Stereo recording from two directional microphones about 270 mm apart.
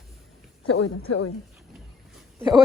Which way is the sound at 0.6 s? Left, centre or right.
Left.